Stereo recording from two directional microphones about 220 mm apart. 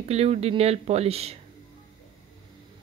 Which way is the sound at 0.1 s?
30° right (ahead or behind).